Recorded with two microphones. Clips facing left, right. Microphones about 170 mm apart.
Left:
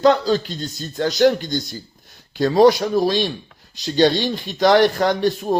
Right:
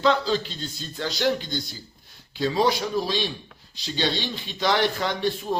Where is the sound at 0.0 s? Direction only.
45° left (ahead or behind).